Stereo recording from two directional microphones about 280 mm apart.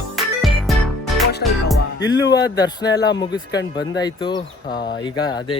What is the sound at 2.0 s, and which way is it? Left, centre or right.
Speech, left.